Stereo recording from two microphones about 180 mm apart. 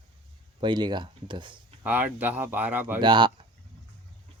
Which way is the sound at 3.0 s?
25° right (ahead or behind).